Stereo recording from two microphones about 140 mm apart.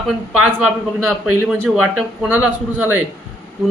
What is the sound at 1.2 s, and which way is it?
A man's voice, 5° right (ahead or behind).